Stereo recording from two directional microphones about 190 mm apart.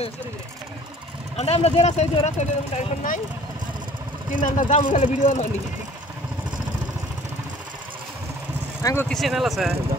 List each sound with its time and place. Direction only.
1.3 s speech: 30° left (ahead or behind)
4.3 s speech: 40° left (ahead or behind)
9.1 s speech: centre (ahead or behind)